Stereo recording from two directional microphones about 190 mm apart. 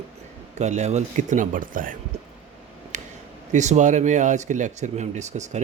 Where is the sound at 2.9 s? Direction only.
40° right (ahead or behind).